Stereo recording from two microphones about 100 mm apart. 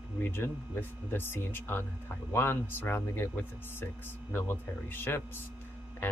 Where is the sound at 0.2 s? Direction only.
20° left (ahead or behind).